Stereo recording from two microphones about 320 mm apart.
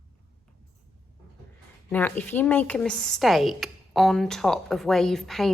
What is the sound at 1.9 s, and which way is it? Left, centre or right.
A woman's voice, centre.